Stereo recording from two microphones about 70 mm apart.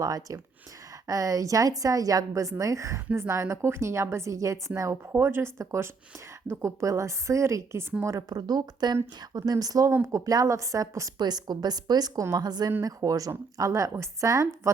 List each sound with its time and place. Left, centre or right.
0.0 s a woman's voice: right
8.3 s a woman's voice: right
9.3 s a woman's voice: right
11.2 s a woman's voice: right
12.8 s a woman's voice: right